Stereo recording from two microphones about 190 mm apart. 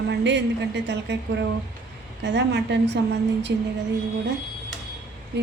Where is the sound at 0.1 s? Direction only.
65° right (ahead or behind).